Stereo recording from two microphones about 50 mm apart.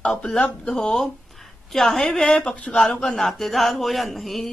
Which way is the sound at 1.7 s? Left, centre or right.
Centre.